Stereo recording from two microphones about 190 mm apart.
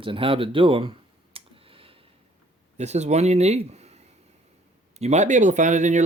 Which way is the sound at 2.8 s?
35° right (ahead or behind).